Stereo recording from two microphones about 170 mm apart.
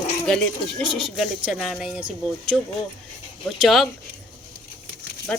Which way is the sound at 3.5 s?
Centre (ahead or behind).